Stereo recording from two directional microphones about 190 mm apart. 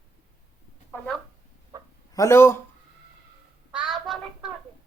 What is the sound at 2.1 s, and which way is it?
Speech, 15° left (ahead or behind).